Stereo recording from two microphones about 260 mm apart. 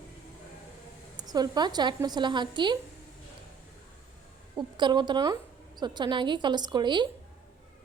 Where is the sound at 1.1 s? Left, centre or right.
Centre.